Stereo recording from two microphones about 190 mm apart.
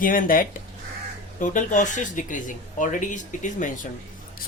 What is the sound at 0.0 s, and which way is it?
Speech, 45° left (ahead or behind).